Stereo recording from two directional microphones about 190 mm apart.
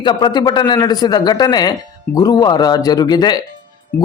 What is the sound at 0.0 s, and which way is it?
A man's voice, 25° left (ahead or behind).